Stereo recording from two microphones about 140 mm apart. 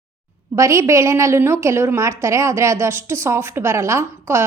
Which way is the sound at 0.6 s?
20° right (ahead or behind).